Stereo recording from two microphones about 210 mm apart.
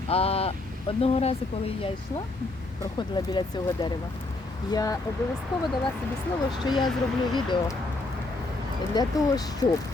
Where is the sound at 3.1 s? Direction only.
20° left (ahead or behind).